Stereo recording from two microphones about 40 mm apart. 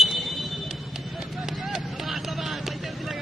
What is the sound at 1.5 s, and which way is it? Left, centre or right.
Vehicle, centre.